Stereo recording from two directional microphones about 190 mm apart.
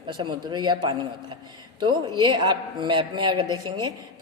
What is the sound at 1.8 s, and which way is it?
A man's voice, 25° right (ahead or behind).